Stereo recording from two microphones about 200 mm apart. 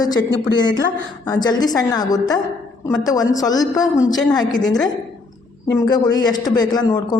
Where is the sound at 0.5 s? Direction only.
20° left (ahead or behind).